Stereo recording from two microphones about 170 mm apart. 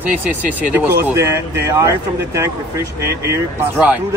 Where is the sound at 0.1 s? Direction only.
10° right (ahead or behind).